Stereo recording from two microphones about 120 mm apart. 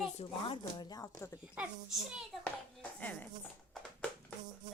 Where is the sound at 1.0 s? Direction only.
25° left (ahead or behind).